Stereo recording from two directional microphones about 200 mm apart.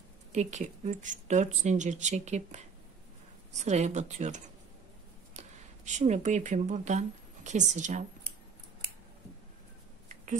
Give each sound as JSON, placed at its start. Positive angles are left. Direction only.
{"t": 0.3, "sound": "speech", "side_deg": -35}
{"t": 5.9, "sound": "speech", "side_deg": -35}